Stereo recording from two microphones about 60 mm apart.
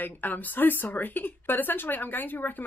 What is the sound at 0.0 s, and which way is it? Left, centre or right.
Speech, left.